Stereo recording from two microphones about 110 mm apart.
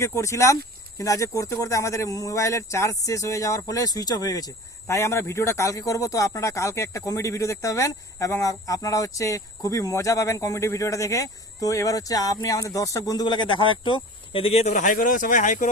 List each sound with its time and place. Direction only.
0.0 s speech: 25° left (ahead or behind); by 14.8 s 70° left (ahead or behind)